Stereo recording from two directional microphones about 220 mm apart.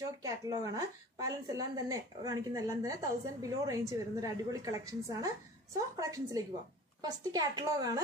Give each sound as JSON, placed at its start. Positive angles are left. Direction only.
{"t": 0.2, "sound": "a woman's voice", "side_deg": -15}